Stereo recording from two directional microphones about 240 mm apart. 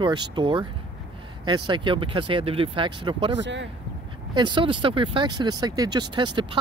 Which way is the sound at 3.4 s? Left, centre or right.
Right.